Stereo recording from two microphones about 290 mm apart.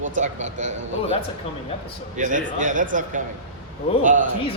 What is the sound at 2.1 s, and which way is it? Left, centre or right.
Speech, right.